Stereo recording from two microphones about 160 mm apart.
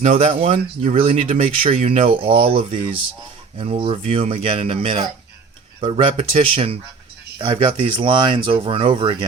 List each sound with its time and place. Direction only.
0.4 s speech: 35° right (ahead or behind)
1.3 s speech: 50° right (ahead or behind)
2.0 s speech: 35° right (ahead or behind)